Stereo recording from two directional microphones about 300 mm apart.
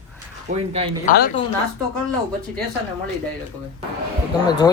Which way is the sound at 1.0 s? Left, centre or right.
Left.